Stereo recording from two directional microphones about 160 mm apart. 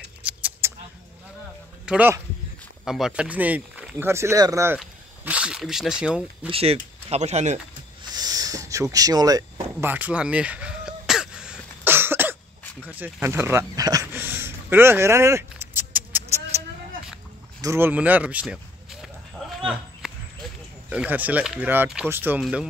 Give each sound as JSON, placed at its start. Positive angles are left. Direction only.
{"t": 0.2, "sound": "keys jangling", "side_deg": -10}
{"t": 1.9, "sound": "speech", "side_deg": -10}
{"t": 5.2, "sound": "speech", "side_deg": -5}
{"t": 6.5, "sound": "speech", "side_deg": -40}
{"t": 8.1, "sound": "a sound", "side_deg": -25}
{"t": 8.9, "sound": "speech", "side_deg": -25}
{"t": 9.8, "sound": "a sound", "side_deg": -10}
{"t": 17.6, "sound": "speech", "side_deg": -15}
{"t": 19.6, "sound": "a sound", "side_deg": -5}
{"t": 20.9, "sound": "speech", "side_deg": -10}